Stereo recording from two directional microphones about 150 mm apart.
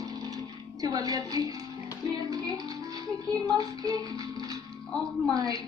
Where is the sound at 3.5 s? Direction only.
25° right (ahead or behind).